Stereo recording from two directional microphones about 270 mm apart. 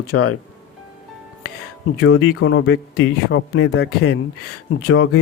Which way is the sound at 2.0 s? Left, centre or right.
Left.